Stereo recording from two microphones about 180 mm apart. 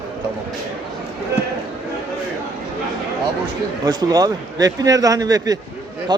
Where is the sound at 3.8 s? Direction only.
20° right (ahead or behind).